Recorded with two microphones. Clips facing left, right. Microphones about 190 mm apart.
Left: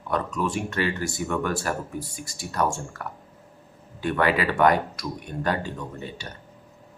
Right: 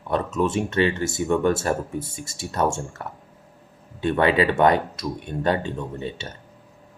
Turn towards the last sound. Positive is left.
turn(degrees=-25)  # may be behind; listen again after turning